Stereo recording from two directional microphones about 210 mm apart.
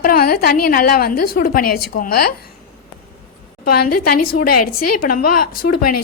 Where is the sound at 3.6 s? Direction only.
45° left (ahead or behind).